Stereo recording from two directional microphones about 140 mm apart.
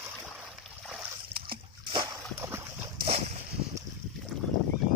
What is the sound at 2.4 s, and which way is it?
Dog, 15° right (ahead or behind).